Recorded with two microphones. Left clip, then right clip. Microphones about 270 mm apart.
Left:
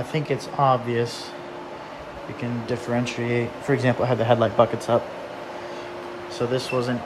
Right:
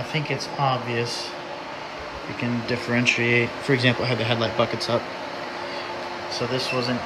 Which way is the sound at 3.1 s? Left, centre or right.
Left.